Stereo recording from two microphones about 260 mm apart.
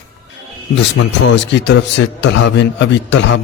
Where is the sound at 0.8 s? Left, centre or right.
Left.